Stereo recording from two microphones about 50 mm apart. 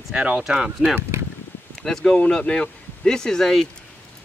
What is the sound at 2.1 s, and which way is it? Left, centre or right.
Speech, left.